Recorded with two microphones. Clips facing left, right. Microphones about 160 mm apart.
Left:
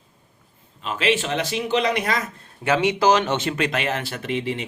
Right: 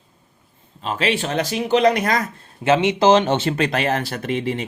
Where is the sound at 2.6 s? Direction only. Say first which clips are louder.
Right 3 dB; 25° right (ahead or behind).